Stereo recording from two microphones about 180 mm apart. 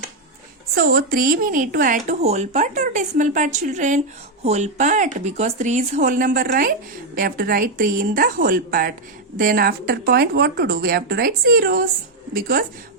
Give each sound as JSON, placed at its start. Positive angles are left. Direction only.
{"t": 0.8, "sound": "speech", "side_deg": -55}